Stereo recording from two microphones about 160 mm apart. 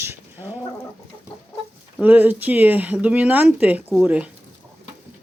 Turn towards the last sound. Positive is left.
turn(degrees=-10)  # may be behind; listen again after turning